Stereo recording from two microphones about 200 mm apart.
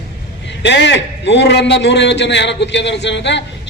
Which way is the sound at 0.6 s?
60° left (ahead or behind).